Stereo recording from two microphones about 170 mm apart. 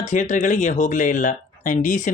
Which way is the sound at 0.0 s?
45° left (ahead or behind).